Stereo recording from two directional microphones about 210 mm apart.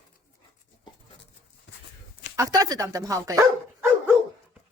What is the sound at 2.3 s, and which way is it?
Speech, 15° right (ahead or behind).